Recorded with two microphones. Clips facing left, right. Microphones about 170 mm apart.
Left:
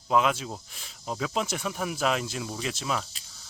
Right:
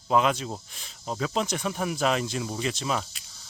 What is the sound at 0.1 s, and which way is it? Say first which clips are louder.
Cricket: right 1 dB; centre (ahead or behind).